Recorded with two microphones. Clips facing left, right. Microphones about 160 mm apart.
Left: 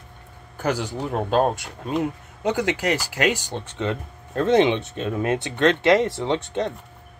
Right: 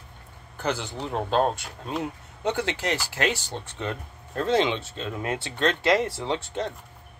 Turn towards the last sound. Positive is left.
turn(degrees=20)  # may be behind; listen again after turning